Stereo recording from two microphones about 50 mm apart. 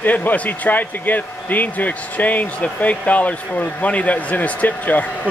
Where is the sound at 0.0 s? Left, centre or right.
Left.